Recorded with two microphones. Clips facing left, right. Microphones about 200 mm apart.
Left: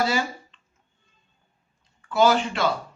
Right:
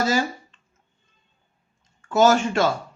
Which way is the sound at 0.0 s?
45° right (ahead or behind).